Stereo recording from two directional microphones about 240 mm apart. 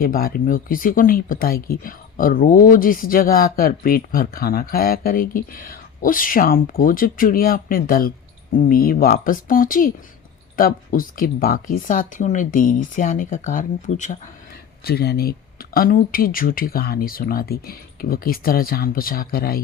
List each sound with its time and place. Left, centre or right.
0.0 s speech: left
14.8 s speech: left